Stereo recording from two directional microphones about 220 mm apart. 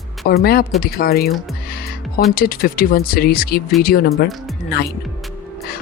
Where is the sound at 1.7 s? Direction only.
45° left (ahead or behind).